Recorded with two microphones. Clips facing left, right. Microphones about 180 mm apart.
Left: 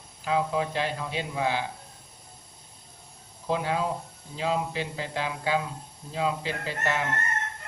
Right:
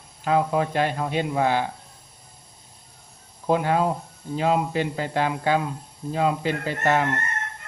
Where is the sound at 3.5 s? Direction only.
55° right (ahead or behind).